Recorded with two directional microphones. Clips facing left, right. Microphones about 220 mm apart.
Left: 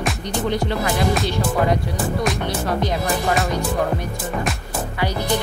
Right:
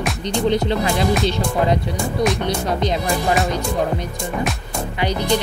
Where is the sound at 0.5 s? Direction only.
20° right (ahead or behind).